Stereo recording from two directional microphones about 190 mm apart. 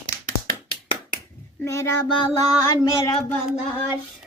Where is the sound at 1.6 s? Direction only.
15° left (ahead or behind).